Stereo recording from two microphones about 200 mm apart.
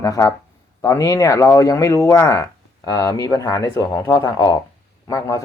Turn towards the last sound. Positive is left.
turn(degrees=15)  # may be behind; listen again after turning